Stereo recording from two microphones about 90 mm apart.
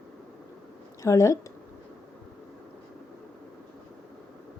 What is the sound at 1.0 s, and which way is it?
Speech, 35° left (ahead or behind).